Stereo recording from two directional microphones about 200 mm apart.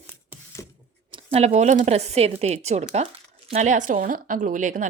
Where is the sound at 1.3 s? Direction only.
35° right (ahead or behind).